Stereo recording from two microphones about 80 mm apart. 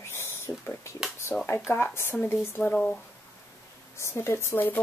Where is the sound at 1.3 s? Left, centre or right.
Centre.